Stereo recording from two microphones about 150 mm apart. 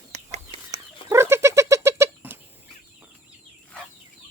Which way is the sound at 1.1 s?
15° right (ahead or behind).